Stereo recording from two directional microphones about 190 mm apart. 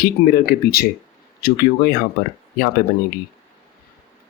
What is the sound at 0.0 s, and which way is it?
Speech, 50° left (ahead or behind).